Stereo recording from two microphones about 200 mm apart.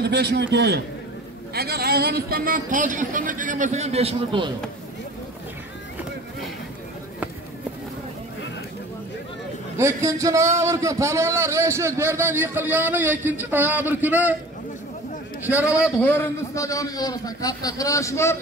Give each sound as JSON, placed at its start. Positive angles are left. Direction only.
{"t": 0.0, "sound": "a man's voice", "side_deg": -55}
{"t": 9.8, "sound": "a man's voice", "side_deg": -15}
{"t": 15.4, "sound": "a man's voice", "side_deg": -10}
{"t": 16.0, "sound": "a man's voice", "side_deg": 10}